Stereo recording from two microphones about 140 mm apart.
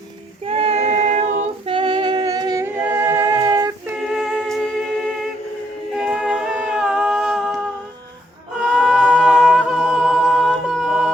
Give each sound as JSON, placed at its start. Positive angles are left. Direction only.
{"t": 0.4, "sound": "female singing", "side_deg": -45}
{"t": 1.6, "sound": "humming", "side_deg": -35}
{"t": 2.6, "sound": "music", "side_deg": -15}
{"t": 3.4, "sound": "a sound", "side_deg": -25}
{"t": 4.1, "sound": "music", "side_deg": 0}
{"t": 6.0, "sound": "humming", "side_deg": -5}
{"t": 8.6, "sound": "music", "side_deg": 0}
{"t": 9.5, "sound": "a capella", "side_deg": -5}